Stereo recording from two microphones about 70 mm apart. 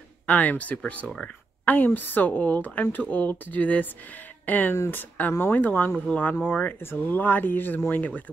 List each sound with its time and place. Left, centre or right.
0.3 s a woman's voice: left